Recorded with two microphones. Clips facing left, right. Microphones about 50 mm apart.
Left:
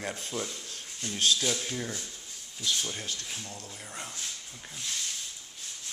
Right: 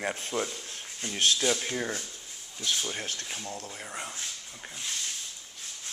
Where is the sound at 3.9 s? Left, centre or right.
Centre.